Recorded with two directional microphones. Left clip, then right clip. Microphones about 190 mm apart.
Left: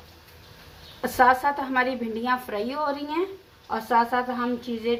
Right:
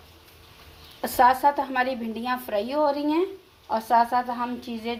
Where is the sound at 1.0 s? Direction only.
45° right (ahead or behind).